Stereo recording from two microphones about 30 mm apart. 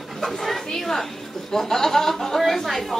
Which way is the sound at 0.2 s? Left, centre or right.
Centre.